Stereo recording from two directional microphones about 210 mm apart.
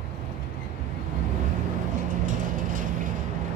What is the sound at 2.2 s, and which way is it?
Vehicle, 40° right (ahead or behind).